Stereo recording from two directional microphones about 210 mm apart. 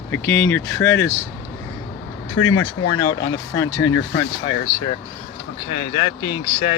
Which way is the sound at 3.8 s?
65° left (ahead or behind).